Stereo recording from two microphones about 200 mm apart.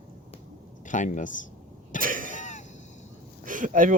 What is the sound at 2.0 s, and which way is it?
Cough, 45° right (ahead or behind).